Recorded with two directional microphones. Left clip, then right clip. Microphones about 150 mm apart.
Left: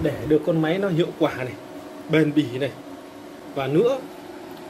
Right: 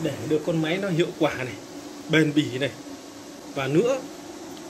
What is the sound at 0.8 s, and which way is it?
Speech, 20° left (ahead or behind).